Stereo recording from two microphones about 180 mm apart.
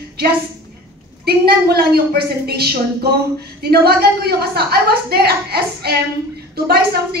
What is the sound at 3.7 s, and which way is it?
Speech, 60° right (ahead or behind).